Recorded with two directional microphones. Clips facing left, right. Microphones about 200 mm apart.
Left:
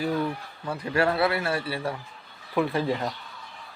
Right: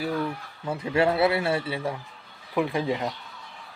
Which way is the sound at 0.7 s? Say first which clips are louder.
Right 2 dB; 20° right (ahead or behind).